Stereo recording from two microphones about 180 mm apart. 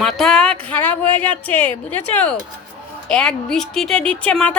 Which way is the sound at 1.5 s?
10° left (ahead or behind).